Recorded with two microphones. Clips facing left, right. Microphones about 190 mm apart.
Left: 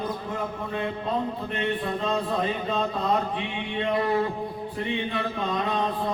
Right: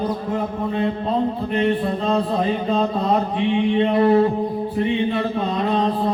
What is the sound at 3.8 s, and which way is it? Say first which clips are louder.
Speech: right 7 dB; 30° right (ahead or behind).